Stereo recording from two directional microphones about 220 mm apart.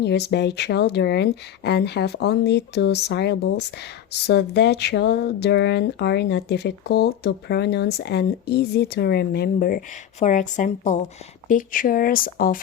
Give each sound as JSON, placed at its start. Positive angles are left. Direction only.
{"t": 0.0, "sound": "speech", "side_deg": 50}